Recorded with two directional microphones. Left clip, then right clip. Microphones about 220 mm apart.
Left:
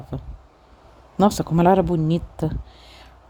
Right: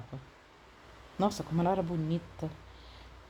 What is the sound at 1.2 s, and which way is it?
A woman's voice, 40° left (ahead or behind).